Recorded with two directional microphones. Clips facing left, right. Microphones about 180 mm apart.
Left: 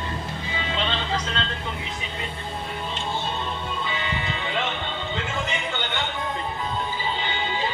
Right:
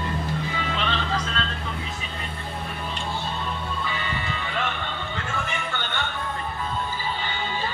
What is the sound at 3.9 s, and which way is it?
Music, 20° left (ahead or behind).